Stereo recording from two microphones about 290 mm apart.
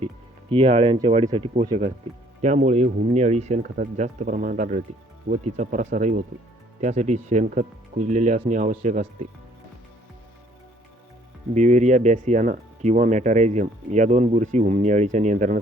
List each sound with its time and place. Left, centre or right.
0.5 s speech: centre
11.5 s speech: right